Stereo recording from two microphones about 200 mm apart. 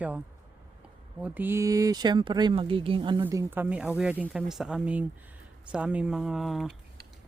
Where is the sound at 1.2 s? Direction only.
10° right (ahead or behind); by 3.2 s 25° right (ahead or behind).